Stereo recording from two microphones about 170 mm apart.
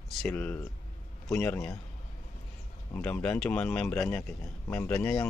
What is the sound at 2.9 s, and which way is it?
Speech, 10° left (ahead or behind).